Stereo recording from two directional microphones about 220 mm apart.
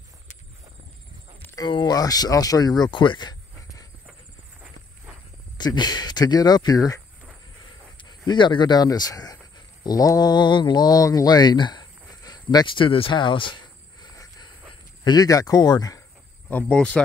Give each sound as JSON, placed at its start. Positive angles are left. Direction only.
{"t": 1.4, "sound": "speech", "side_deg": 15}
{"t": 5.6, "sound": "speech", "side_deg": 20}
{"t": 8.3, "sound": "speech", "side_deg": 20}
{"t": 15.0, "sound": "speech", "side_deg": 15}